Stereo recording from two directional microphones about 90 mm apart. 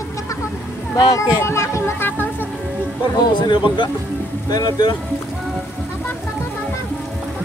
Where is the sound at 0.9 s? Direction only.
45° left (ahead or behind).